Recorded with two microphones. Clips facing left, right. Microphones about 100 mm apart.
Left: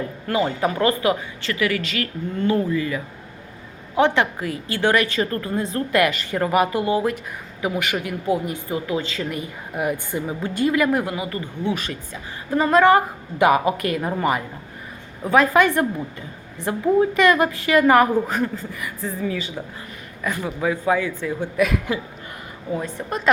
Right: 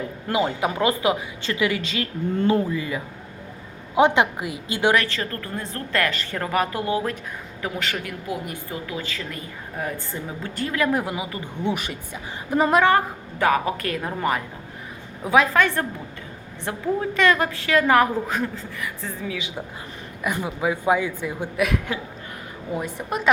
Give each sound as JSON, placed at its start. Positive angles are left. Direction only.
{"t": 0.3, "sound": "speech", "side_deg": -15}
{"t": 5.0, "sound": "a woman's voice", "side_deg": 20}
{"t": 7.9, "sound": "a woman's voice", "side_deg": 20}
{"t": 10.8, "sound": "a woman's voice", "side_deg": 0}
{"t": 13.4, "sound": "a woman's voice", "side_deg": 10}
{"t": 15.5, "sound": "a woman's voice", "side_deg": 10}
{"t": 20.2, "sound": "speech", "side_deg": -15}
{"t": 21.6, "sound": "a woman's voice", "side_deg": 0}